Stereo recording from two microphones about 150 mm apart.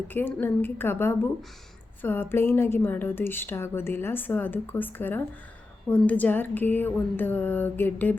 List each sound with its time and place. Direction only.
0.1 s a woman's voice: 15° left (ahead or behind)